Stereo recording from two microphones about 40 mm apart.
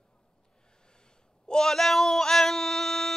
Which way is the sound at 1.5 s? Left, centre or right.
Centre.